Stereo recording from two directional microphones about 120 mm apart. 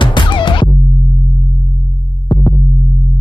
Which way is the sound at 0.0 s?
45° left (ahead or behind).